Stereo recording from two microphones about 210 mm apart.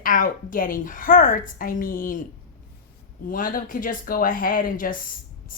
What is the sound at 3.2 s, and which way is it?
A woman's voice, 40° left (ahead or behind).